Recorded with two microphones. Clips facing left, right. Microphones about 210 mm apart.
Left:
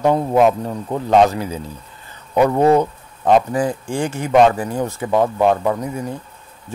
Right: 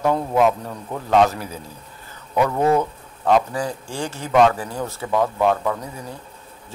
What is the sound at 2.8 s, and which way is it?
Speech, 20° left (ahead or behind).